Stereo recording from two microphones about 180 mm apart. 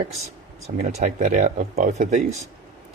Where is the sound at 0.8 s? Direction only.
40° right (ahead or behind).